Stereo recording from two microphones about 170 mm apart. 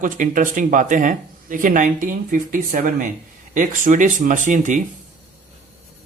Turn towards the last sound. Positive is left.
turn(degrees=-50)  # may be behind; listen again after turning